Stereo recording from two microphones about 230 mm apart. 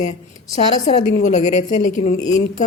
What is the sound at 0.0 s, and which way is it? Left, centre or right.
A woman's voice, left.